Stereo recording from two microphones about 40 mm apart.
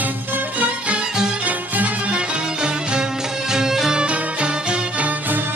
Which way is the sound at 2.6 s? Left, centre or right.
Right.